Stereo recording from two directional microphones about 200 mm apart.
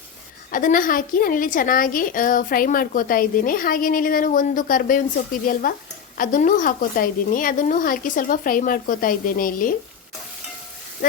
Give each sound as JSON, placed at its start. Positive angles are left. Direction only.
{"t": 0.5, "sound": "a woman's voice", "side_deg": 45}